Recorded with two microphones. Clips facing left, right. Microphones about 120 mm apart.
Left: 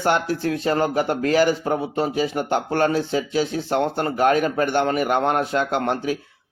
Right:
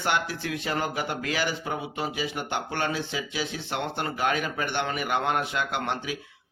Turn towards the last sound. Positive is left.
turn(degrees=40)  # may be behind; listen again after turning